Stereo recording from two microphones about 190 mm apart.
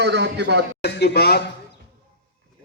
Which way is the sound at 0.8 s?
60° left (ahead or behind).